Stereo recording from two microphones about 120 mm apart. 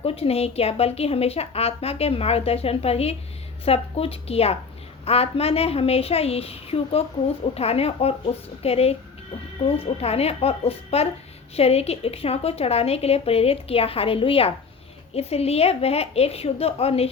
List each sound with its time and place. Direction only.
0.0 s a woman's voice: 55° left (ahead or behind)